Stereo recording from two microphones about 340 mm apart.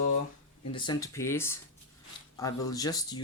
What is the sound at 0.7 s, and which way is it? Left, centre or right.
Speech, centre.